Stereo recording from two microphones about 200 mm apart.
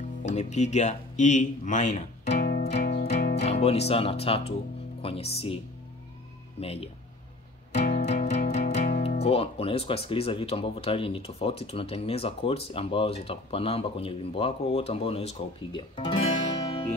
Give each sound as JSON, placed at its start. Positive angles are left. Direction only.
{"t": 0.2, "sound": "speech", "side_deg": 35}
{"t": 2.4, "sound": "music", "side_deg": 45}
{"t": 3.4, "sound": "speech", "side_deg": 30}
{"t": 6.6, "sound": "speech", "side_deg": 30}
{"t": 7.7, "sound": "music", "side_deg": 40}
{"t": 8.7, "sound": "speech", "side_deg": 35}